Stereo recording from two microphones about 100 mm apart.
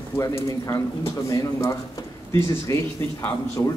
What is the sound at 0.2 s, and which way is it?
A man's voice, 30° left (ahead or behind).